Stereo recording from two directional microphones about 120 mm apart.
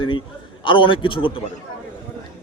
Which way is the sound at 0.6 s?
45° left (ahead or behind).